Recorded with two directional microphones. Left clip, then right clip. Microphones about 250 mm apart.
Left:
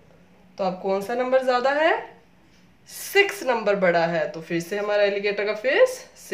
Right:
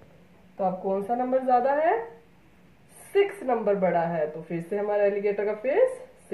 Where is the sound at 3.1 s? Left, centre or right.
Left.